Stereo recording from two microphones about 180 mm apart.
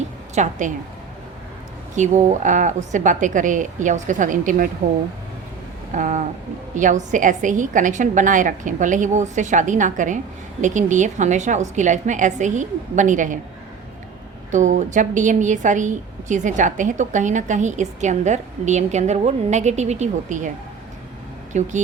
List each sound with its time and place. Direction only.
0.4 s a woman's voice: 40° right (ahead or behind)
2.0 s a woman's voice: 45° right (ahead or behind)
5.9 s a woman's voice: 45° right (ahead or behind)
14.5 s a woman's voice: 45° right (ahead or behind)
21.5 s a woman's voice: 40° right (ahead or behind)